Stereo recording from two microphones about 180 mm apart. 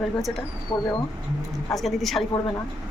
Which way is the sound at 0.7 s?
20° left (ahead or behind).